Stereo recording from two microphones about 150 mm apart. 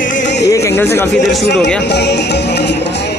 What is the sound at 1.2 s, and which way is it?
Speech, centre (ahead or behind).